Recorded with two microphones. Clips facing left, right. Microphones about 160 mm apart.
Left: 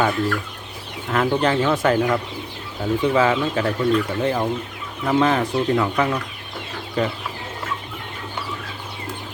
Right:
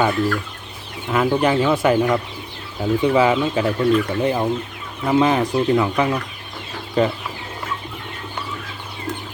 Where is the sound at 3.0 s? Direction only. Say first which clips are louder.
Right 2 dB; 15° right (ahead or behind).